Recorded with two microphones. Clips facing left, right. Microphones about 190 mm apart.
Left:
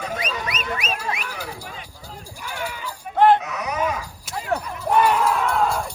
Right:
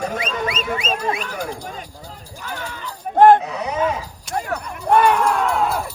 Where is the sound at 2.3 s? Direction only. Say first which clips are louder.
Even; 10° left (ahead or behind).